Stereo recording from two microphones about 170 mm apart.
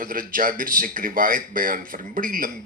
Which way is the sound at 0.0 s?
55° right (ahead or behind).